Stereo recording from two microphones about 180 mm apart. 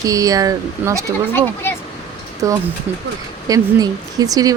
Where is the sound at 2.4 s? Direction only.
20° right (ahead or behind).